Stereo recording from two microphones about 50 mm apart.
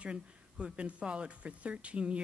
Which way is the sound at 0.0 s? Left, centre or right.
Right.